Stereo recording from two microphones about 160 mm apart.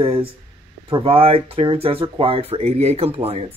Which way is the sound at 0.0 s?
35° right (ahead or behind).